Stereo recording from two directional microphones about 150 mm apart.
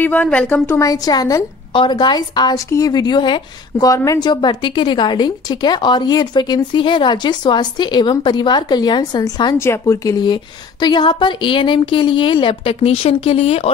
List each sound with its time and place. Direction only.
0.0 s a woman's voice: 10° left (ahead or behind)
0.7 s a woman's voice: 25° left (ahead or behind); by 13.7 s 40° left (ahead or behind)